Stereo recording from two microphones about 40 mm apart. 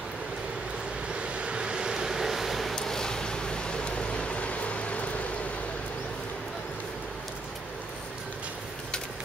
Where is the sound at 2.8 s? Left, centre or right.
Centre; by 5.3 s left.